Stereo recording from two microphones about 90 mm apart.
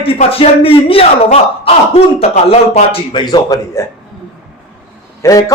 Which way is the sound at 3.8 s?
35° left (ahead or behind).